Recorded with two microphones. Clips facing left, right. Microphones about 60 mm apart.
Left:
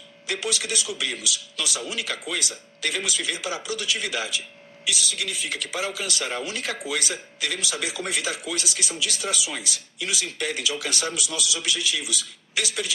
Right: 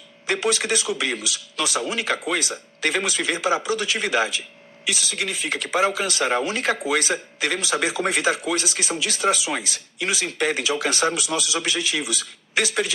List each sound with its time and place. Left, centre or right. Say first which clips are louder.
0.3 s speech: right 6 dB; right